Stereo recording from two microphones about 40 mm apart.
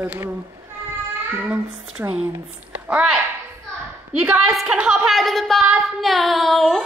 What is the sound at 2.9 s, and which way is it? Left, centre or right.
Speech, centre.